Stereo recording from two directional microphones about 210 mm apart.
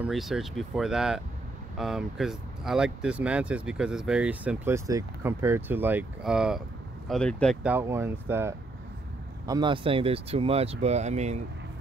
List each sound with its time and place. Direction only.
0.0 s speech: centre (ahead or behind)
7.6 s speech: 10° right (ahead or behind)
9.5 s speech: 20° right (ahead or behind)